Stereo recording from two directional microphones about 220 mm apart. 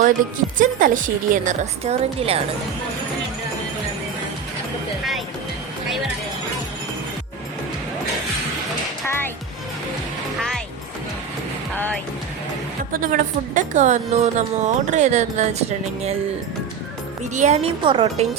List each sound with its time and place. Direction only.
0.0 s a woman's voice: 40° right (ahead or behind)
12.9 s a woman's voice: 40° right (ahead or behind)
17.3 s a woman's voice: 30° right (ahead or behind)